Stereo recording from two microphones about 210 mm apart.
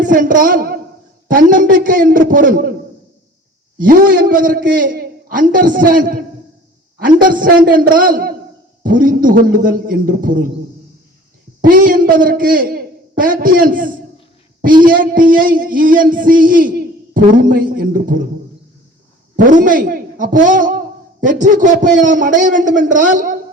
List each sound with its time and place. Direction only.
0.0 s a woman's voice: 40° right (ahead or behind)
1.3 s music: 40° right (ahead or behind)
3.8 s music: 40° right (ahead or behind)
11.6 s a man's voice: 40° right (ahead or behind)
14.8 s music: 40° right (ahead or behind)
19.4 s a man's voice: 40° right (ahead or behind)